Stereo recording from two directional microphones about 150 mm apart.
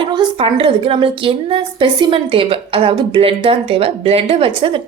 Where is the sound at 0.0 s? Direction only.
30° right (ahead or behind).